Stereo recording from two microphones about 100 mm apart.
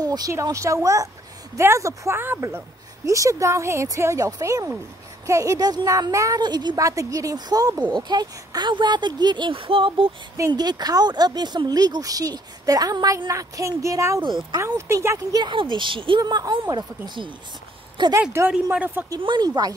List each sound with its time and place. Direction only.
0.0 s speech: 40° right (ahead or behind)
6.4 s speech: 45° right (ahead or behind)
6.8 s speech: 35° right (ahead or behind); by 10.1 s 60° right (ahead or behind)
10.5 s speech: 45° right (ahead or behind)
14.2 s speech: 50° right (ahead or behind)
14.6 s speech: 30° right (ahead or behind)
15.5 s a woman's voice: 55° right (ahead or behind)
16.2 s speech: 40° right (ahead or behind)
18.5 s speech: 15° right (ahead or behind)
19.0 s speech: 45° right (ahead or behind)